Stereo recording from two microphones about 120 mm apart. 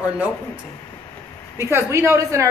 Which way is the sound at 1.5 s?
25° right (ahead or behind).